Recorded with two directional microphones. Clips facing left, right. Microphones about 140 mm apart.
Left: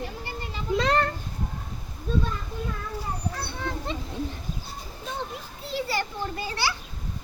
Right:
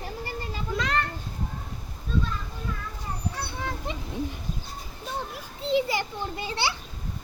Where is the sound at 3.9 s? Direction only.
15° right (ahead or behind).